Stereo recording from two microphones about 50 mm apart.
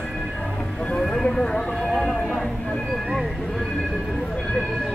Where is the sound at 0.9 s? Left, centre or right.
Centre.